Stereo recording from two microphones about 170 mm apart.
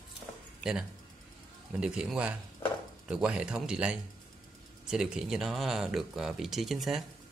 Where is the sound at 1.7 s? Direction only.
5° right (ahead or behind).